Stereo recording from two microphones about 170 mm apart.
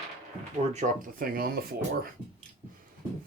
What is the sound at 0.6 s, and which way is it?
Speech, 40° right (ahead or behind).